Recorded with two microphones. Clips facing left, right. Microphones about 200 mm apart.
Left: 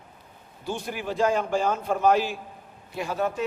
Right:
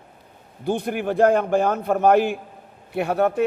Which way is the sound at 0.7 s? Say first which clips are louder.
Right 8 dB; 55° right (ahead or behind).